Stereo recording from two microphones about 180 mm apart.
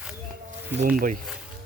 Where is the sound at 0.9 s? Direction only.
50° right (ahead or behind).